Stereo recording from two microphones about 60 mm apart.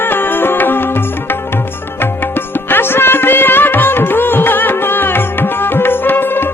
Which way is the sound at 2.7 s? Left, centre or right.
Left.